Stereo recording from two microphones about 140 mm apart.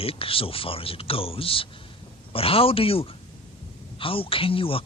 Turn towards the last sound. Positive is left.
turn(degrees=40)  # may be behind; listen again after turning